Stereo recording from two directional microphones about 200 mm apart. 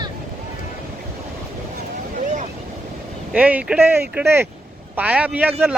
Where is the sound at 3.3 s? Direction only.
5° right (ahead or behind).